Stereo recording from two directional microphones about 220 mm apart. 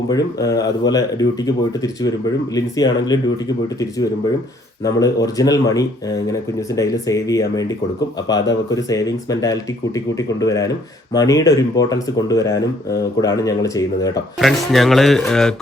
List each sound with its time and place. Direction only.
0.1 s speech: 15° left (ahead or behind)
4.8 s speech: 15° left (ahead or behind)
8.7 s speech: 15° left (ahead or behind)
14.3 s speech: centre (ahead or behind)